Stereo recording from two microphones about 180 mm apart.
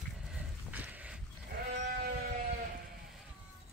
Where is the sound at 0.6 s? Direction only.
10° right (ahead or behind).